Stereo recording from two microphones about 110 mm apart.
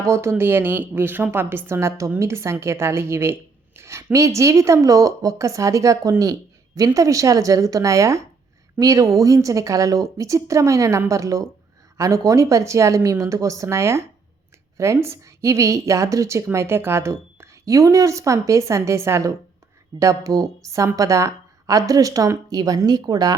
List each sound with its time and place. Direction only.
0.0 s a woman's voice: 25° right (ahead or behind)